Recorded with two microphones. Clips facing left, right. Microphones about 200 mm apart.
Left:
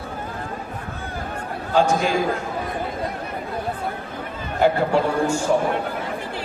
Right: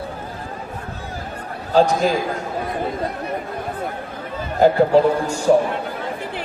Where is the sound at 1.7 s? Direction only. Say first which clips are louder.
Right 3 dB; 40° right (ahead or behind).